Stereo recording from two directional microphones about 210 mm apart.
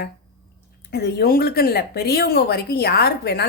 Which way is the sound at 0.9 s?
50° left (ahead or behind).